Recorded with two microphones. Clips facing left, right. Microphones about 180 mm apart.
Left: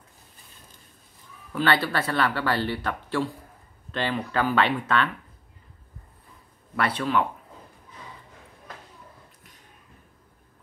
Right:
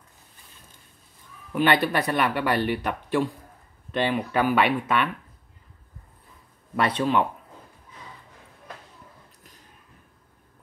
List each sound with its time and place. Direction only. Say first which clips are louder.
1.5 s speech: right 2 dB; 20° right (ahead or behind)
6.8 s speech: right 2 dB; 20° right (ahead or behind)